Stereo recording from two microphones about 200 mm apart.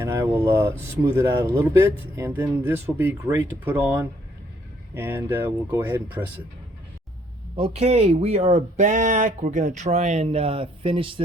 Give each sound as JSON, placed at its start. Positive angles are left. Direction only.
{"t": 0.0, "sound": "speech", "side_deg": -15}
{"t": 7.5, "sound": "speech", "side_deg": -30}